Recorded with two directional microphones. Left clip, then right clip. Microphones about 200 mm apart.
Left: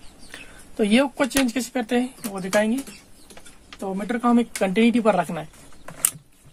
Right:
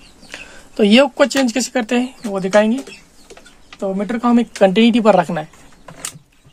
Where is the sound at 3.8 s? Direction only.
40° right (ahead or behind).